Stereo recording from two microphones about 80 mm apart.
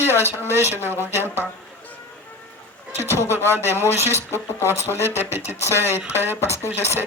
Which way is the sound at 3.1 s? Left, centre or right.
Right.